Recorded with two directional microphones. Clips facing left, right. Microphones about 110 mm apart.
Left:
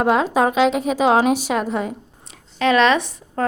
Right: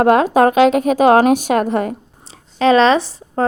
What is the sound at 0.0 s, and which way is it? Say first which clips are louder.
A woman's voice: right 5 dB; 55° right (ahead or behind).